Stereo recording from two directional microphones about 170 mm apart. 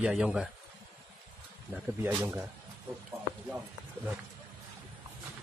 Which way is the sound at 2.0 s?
15° right (ahead or behind).